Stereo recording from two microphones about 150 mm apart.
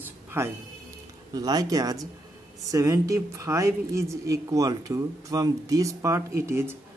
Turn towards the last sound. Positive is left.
turn(degrees=-15)  # may be behind; listen again after turning